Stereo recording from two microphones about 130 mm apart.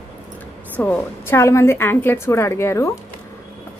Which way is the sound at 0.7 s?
15° left (ahead or behind).